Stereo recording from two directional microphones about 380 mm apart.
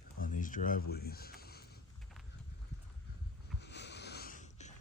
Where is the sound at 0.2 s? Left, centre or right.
Left.